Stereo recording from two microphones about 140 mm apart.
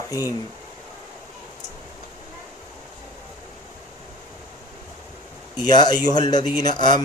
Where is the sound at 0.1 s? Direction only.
25° left (ahead or behind).